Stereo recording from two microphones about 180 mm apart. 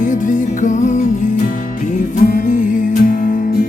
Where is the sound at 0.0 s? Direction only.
45° left (ahead or behind).